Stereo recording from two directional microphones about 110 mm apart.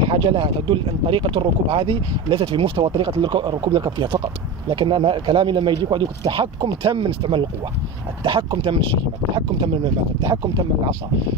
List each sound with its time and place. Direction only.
0.0 s speech: 50° right (ahead or behind)
10.2 s speech: 40° right (ahead or behind)